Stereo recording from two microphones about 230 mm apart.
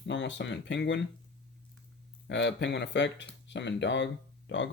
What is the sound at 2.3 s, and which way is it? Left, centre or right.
Speech, left.